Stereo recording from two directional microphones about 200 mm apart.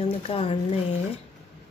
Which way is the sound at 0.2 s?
30° left (ahead or behind).